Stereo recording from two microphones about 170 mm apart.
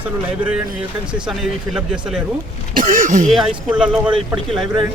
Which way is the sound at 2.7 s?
50° right (ahead or behind).